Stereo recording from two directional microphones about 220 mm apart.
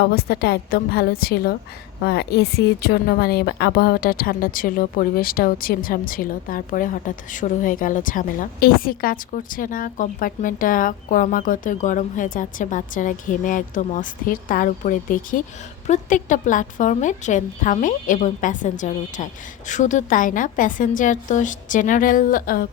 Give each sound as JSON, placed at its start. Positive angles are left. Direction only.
{"t": 0.0, "sound": "a woman's voice", "side_deg": 45}